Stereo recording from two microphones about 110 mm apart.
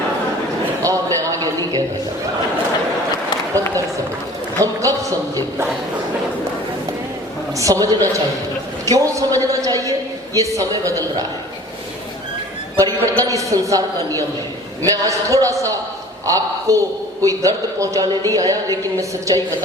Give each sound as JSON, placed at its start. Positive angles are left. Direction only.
{"t": 0.8, "sound": "a sound", "side_deg": -30}
{"t": 4.6, "sound": "a man's voice", "side_deg": -30}
{"t": 7.6, "sound": "a man's voice", "side_deg": -30}
{"t": 12.7, "sound": "a woman's voice", "side_deg": -30}